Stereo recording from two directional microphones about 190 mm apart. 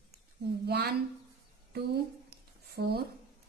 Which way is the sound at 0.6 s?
55° right (ahead or behind).